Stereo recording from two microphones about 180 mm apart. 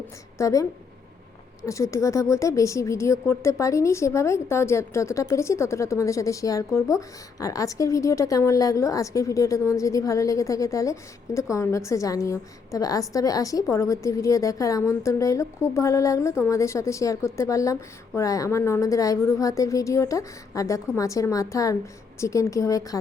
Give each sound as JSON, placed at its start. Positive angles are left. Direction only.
{"t": 0.3, "sound": "a woman's voice", "side_deg": 15}